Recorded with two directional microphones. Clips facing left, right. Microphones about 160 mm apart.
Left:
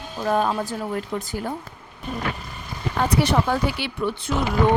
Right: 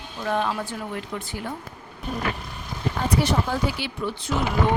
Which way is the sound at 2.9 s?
70° left (ahead or behind).